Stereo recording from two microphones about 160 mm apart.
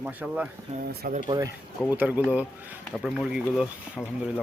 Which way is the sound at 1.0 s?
65° right (ahead or behind).